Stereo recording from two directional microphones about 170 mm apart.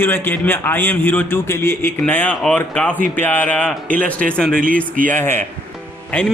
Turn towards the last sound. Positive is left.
turn(degrees=10)  # may be behind; listen again after turning